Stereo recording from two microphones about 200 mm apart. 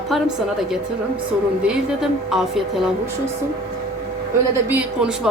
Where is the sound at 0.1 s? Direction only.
Centre (ahead or behind).